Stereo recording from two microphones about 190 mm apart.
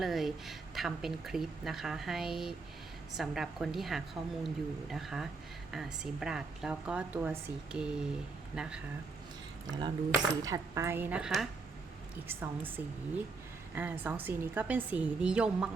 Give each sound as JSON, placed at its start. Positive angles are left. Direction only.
{"t": 0.0, "sound": "speech", "side_deg": 0}
{"t": 9.6, "sound": "a woman's voice", "side_deg": -20}